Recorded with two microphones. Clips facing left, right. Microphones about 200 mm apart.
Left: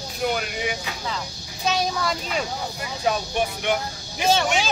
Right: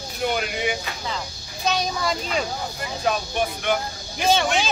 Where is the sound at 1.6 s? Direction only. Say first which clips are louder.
Even; centre (ahead or behind).